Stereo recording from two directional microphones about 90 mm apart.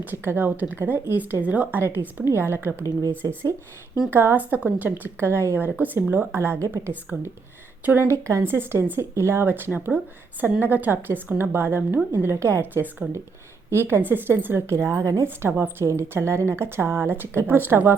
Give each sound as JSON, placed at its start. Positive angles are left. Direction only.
{"t": 0.0, "sound": "speech", "side_deg": -20}
{"t": 4.1, "sound": "speech", "side_deg": -25}